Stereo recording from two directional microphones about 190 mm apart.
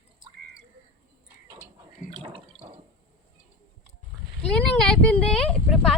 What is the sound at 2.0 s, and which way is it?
Drip, 25° right (ahead or behind).